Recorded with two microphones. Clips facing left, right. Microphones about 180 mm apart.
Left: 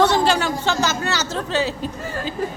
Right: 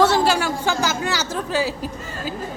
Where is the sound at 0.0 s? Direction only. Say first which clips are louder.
Even; 5° right (ahead or behind).